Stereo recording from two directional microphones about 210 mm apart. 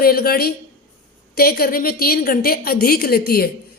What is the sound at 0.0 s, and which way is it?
A woman's voice, 45° left (ahead or behind).